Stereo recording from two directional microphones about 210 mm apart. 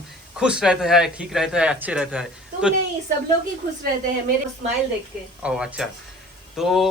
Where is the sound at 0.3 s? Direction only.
5° right (ahead or behind).